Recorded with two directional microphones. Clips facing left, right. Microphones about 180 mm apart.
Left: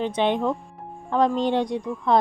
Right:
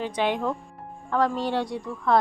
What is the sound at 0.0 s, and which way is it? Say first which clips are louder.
A woman's voice: left 3 dB; 20° left (ahead or behind).